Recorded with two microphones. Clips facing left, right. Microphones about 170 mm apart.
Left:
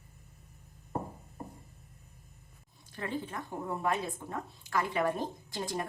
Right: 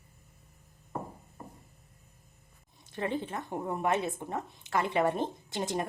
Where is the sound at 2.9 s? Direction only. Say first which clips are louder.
Right 4 dB; 20° right (ahead or behind).